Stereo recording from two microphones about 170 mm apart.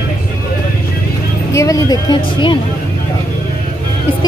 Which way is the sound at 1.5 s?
20° left (ahead or behind).